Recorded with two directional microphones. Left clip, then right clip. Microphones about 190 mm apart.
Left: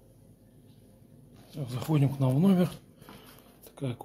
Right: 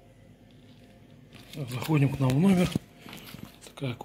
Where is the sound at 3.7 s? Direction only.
10° left (ahead or behind).